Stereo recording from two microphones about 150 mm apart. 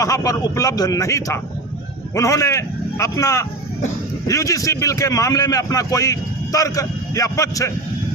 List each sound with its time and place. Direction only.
0.0 s a man's voice: 25° left (ahead or behind)